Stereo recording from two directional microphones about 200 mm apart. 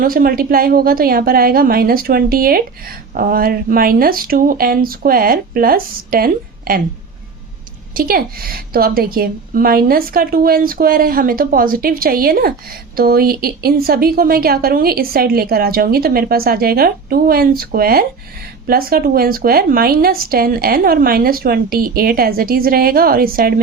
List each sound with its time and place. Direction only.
0.0 s a woman's voice: 45° right (ahead or behind)
7.9 s a woman's voice: 45° right (ahead or behind)